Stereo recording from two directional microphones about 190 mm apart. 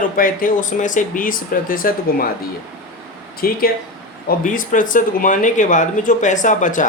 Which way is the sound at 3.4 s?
50° left (ahead or behind).